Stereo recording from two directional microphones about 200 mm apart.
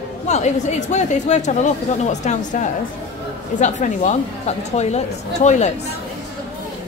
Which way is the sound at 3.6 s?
35° left (ahead or behind).